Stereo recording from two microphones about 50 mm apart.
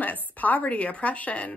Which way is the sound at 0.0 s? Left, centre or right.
Left.